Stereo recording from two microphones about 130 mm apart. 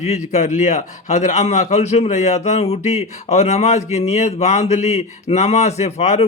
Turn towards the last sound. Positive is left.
turn(degrees=55)  # may be behind; listen again after turning